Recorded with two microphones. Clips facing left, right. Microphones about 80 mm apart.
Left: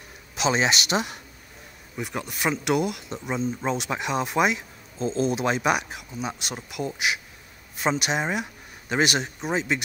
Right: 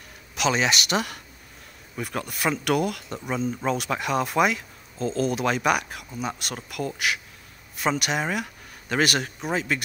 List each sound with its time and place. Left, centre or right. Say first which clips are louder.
0.4 s speech: even; left